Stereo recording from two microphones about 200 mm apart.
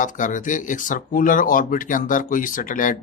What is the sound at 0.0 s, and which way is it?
A man's voice, 40° left (ahead or behind).